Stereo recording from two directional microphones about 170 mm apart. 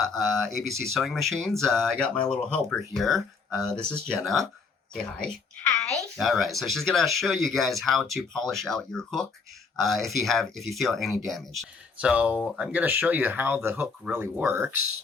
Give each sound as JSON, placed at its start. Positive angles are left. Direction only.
{"t": 0.0, "sound": "speech", "side_deg": 0}